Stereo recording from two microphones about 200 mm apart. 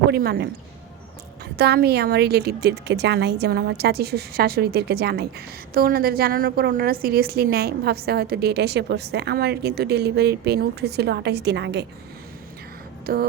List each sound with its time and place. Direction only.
0.1 s a woman's voice: 50° right (ahead or behind)
1.5 s a woman's voice: 55° right (ahead or behind)
13.1 s a woman's voice: 50° right (ahead or behind)